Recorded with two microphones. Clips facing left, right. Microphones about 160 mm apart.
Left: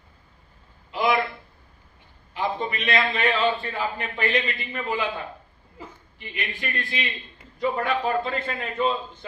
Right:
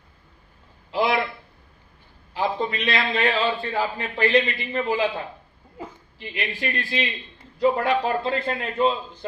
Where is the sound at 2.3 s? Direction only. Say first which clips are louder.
Right 2 dB; 35° right (ahead or behind).